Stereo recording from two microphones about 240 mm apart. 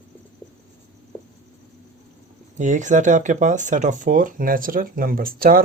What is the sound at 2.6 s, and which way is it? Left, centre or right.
Speech, right.